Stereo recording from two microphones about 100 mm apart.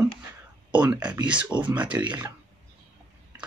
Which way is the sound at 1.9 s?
30° right (ahead or behind).